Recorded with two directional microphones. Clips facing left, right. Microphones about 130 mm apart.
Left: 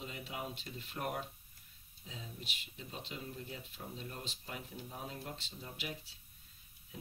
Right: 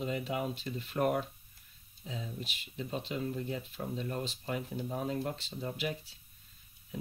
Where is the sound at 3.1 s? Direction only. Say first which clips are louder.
Right 10 dB; 70° right (ahead or behind).